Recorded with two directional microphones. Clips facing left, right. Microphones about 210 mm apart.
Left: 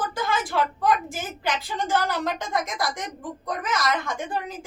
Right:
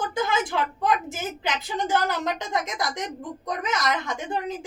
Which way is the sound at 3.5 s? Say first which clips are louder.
Even; 20° right (ahead or behind).